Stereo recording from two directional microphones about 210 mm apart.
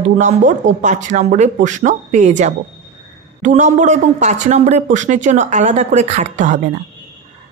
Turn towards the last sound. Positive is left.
turn(degrees=-35)  # may be behind; listen again after turning